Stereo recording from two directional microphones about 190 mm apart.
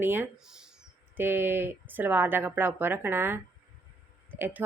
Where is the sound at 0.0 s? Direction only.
10° right (ahead or behind).